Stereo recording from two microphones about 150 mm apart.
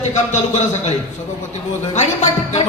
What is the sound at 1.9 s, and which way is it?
Speech, 50° left (ahead or behind).